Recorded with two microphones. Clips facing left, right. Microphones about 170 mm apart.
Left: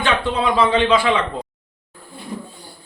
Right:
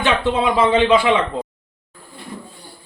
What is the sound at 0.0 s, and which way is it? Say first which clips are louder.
Speech: right 2 dB; 20° right (ahead or behind).